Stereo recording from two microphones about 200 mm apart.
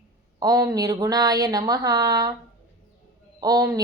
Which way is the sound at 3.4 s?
20° right (ahead or behind).